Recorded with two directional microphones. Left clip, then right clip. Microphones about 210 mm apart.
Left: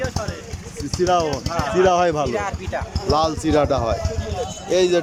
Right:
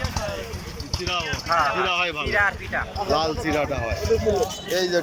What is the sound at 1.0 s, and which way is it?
Speech, 35° left (ahead or behind).